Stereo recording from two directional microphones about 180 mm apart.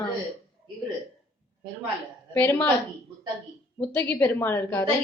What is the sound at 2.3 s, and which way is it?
Speech, 10° left (ahead or behind).